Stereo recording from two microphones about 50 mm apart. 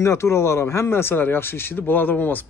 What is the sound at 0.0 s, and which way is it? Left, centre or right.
A man's voice, left.